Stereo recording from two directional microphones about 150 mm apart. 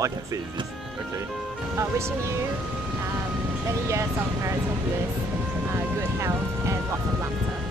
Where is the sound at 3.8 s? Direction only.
20° right (ahead or behind).